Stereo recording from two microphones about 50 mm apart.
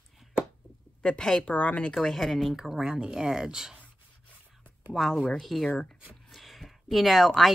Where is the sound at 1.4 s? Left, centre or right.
Left.